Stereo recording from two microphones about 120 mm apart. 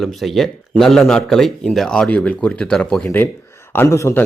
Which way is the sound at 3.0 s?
20° left (ahead or behind).